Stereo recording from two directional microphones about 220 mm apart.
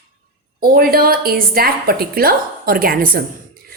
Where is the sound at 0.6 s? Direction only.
40° right (ahead or behind).